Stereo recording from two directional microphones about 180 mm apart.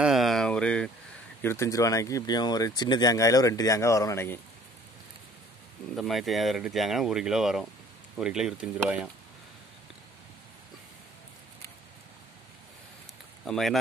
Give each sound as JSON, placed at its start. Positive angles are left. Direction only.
{"t": 0.0, "sound": "a sound", "side_deg": 0}
{"t": 1.4, "sound": "speech", "side_deg": 15}
{"t": 5.9, "sound": "speech", "side_deg": 0}
{"t": 13.5, "sound": "speech", "side_deg": 0}